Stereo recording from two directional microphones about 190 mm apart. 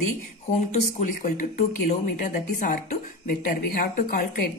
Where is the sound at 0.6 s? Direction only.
35° left (ahead or behind).